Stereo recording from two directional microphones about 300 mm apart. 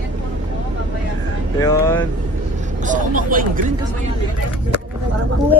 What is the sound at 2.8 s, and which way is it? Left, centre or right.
Speech, right.